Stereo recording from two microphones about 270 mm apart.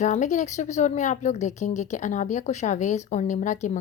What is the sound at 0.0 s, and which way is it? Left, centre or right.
Speech, left.